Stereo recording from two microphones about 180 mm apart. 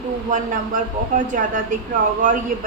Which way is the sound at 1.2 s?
50° right (ahead or behind).